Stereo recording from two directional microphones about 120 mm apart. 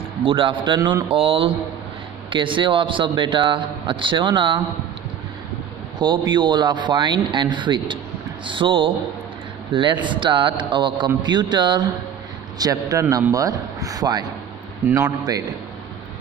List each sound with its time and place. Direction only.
0.2 s speech: 45° right (ahead or behind)
5.9 s a man's voice: 40° right (ahead or behind)